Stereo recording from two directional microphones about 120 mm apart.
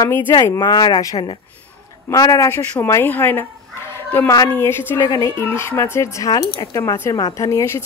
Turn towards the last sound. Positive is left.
turn(degrees=25)  # may be behind; listen again after turning